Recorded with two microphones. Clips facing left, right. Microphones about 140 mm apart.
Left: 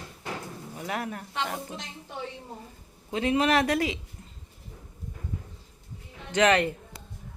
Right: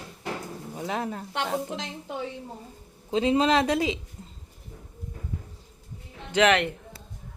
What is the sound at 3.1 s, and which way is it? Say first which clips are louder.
Speech: right 2 dB; 25° right (ahead or behind).